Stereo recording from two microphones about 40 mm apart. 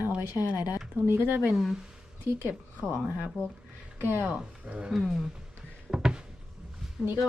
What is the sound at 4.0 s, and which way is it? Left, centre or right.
Speech, right.